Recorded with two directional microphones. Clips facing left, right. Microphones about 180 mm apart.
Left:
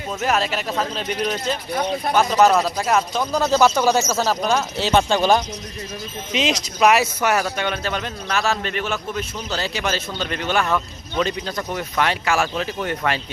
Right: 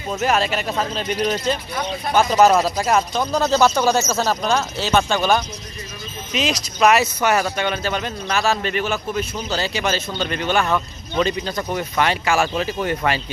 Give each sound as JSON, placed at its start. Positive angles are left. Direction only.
{"t": 0.1, "sound": "a man's voice", "side_deg": 0}
{"t": 4.8, "sound": "speech", "side_deg": 25}
{"t": 6.7, "sound": "a man's voice", "side_deg": 10}